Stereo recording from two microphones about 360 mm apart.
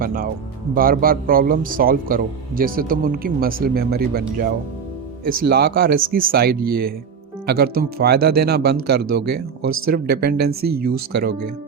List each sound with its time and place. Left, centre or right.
0.0 s a man's voice: right